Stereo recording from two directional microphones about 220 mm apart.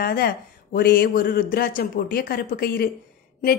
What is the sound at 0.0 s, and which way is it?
A woman's voice, 45° left (ahead or behind).